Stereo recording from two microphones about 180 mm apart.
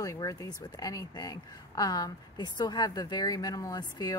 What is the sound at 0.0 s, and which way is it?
Speech, 20° left (ahead or behind).